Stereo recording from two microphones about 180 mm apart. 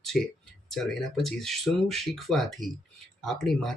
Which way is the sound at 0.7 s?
Centre (ahead or behind).